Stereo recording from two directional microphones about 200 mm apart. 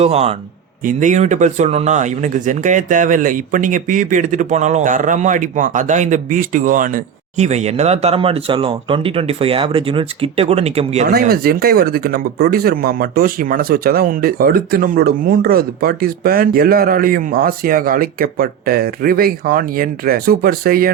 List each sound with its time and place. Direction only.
0.0 s speech: 30° right (ahead or behind)
11.1 s speech: 50° right (ahead or behind)